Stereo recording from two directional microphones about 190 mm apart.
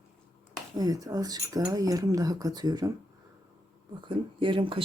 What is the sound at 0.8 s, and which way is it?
Speech, 20° right (ahead or behind).